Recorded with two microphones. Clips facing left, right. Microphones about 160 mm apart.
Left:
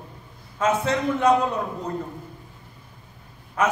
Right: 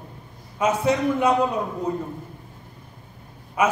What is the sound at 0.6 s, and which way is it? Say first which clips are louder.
Speech: right 2 dB; 10° right (ahead or behind).